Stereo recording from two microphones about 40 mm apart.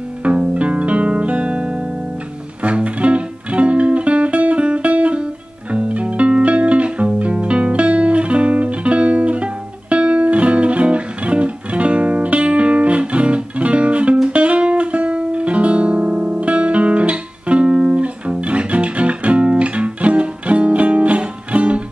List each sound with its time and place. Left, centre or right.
0.2 s music: right